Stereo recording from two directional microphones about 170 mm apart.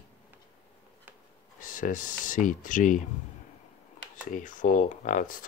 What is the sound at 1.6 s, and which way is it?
Speech, 50° left (ahead or behind).